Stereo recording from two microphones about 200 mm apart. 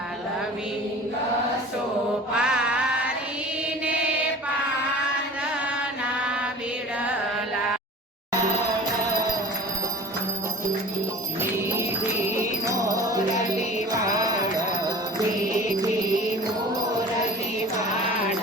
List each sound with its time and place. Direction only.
2.4 s music: 5° right (ahead or behind)
12.4 s music: 15° right (ahead or behind)